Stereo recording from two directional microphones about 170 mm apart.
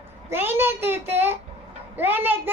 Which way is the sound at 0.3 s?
15° right (ahead or behind).